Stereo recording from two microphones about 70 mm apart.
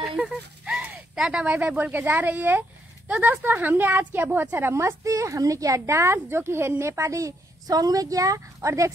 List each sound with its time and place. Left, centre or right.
0.0 s a sound: centre
1.1 s speech: centre
1.4 s a woman's voice: centre; by 5.8 s right
5.9 s speech: right